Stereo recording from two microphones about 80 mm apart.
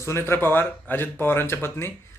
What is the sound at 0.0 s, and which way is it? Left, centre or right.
Speech, left.